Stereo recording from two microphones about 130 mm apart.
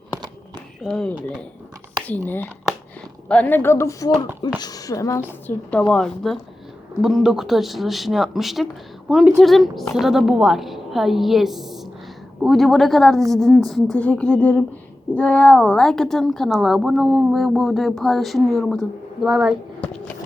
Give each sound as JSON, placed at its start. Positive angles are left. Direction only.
{"t": 0.8, "sound": "a woman's voice", "side_deg": 5}
{"t": 2.0, "sound": "a woman's voice", "side_deg": 15}
{"t": 5.9, "sound": "a woman's voice", "side_deg": 5}